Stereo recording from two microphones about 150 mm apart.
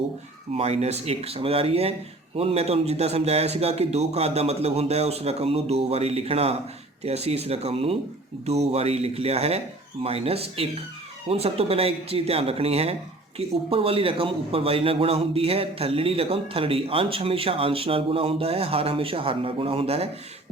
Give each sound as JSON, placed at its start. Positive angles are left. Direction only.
{"t": 0.5, "sound": "a man's voice", "side_deg": -45}